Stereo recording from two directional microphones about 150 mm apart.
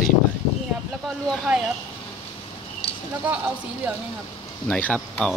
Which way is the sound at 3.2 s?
10° right (ahead or behind).